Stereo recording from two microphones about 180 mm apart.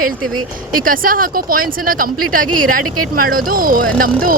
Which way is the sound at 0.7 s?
50° right (ahead or behind).